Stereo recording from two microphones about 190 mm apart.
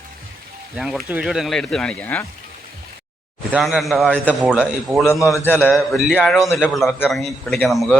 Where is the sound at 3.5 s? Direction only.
Centre (ahead or behind).